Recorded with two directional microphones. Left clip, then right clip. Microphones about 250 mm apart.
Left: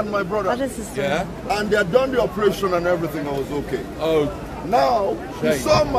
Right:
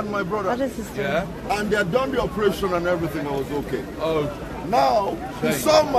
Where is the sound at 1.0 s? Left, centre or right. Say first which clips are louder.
Left 2 dB; left.